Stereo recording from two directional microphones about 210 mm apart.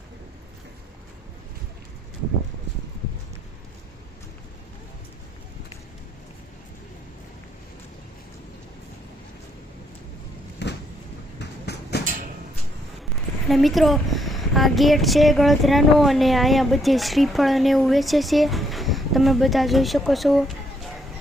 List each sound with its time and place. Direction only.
10.6 s a sound: 55° left (ahead or behind)
11.3 s train: 50° left (ahead or behind)
13.5 s a woman's voice: centre (ahead or behind)